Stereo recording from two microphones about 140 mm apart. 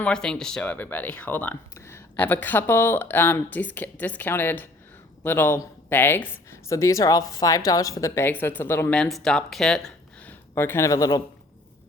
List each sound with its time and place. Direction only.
0.0 s speech: 5° left (ahead or behind)
9.0 s speech: 5° left (ahead or behind); by 11.2 s 25° left (ahead or behind)